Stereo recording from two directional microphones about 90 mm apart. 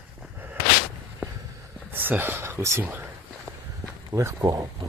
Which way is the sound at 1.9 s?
20° right (ahead or behind).